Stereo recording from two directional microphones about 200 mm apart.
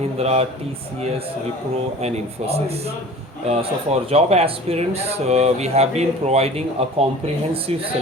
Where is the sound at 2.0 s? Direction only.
30° right (ahead or behind).